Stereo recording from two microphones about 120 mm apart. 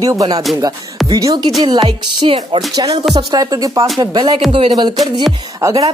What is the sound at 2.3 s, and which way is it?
Speech, 50° right (ahead or behind).